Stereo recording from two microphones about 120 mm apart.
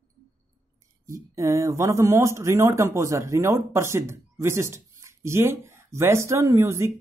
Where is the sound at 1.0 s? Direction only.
25° right (ahead or behind).